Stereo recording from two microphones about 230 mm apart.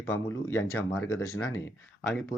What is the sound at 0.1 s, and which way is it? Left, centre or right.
Speech, centre.